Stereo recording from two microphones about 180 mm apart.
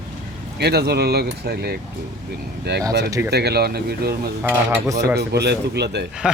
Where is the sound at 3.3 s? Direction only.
65° right (ahead or behind).